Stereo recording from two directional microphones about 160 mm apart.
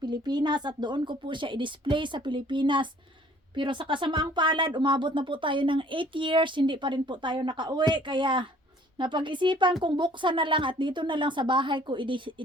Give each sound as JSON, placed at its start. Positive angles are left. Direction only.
{"t": 0.0, "sound": "speech", "side_deg": -25}